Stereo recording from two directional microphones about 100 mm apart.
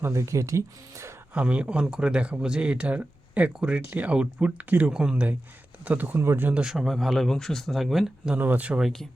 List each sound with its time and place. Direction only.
0.0 s speech: 30° right (ahead or behind)
1.3 s speech: 15° right (ahead or behind)
8.4 s speech: 15° right (ahead or behind)
8.8 s speech: 5° left (ahead or behind)